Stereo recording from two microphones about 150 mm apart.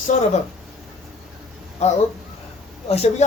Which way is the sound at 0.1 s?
50° left (ahead or behind).